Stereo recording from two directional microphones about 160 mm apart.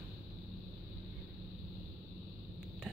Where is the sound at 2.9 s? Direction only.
Centre (ahead or behind).